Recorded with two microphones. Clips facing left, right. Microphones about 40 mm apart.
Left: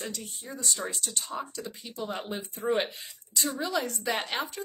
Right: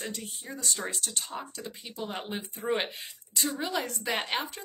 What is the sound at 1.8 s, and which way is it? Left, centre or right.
Speech, centre.